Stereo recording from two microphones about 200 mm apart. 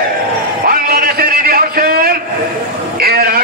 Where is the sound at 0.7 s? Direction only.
50° right (ahead or behind).